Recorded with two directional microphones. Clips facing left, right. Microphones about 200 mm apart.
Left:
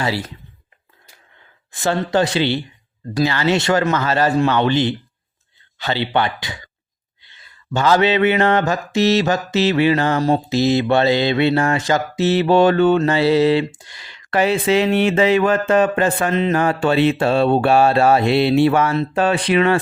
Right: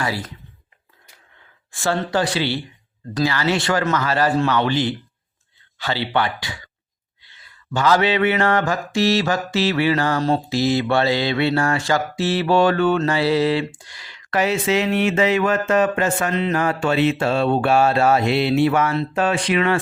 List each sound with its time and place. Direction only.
0.0 s mantra: 25° left (ahead or behind)
1.7 s mantra: 20° left (ahead or behind)
13.1 s speech: 25° left (ahead or behind)